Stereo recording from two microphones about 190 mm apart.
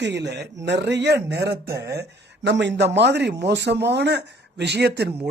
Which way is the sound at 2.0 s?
70° right (ahead or behind).